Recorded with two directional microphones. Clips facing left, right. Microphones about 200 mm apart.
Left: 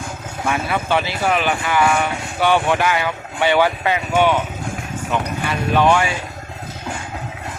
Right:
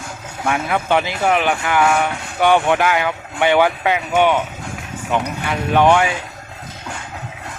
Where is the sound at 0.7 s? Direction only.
15° right (ahead or behind).